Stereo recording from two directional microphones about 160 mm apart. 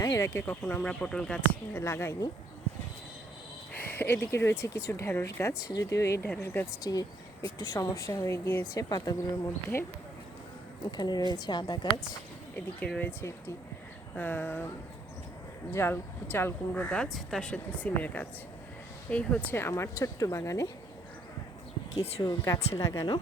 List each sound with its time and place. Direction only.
0.0 s speech: 20° left (ahead or behind)
1.8 s speech: 15° left (ahead or behind)
3.9 s speech: 15° left (ahead or behind)
10.9 s speech: 25° left (ahead or behind)
12.5 s speech: 10° left (ahead or behind)
15.7 s speech: 15° left (ahead or behind)
22.0 s speech: 30° left (ahead or behind)
22.7 s speech: 20° left (ahead or behind)